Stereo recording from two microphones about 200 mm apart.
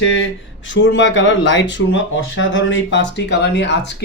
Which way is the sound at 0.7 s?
65° left (ahead or behind).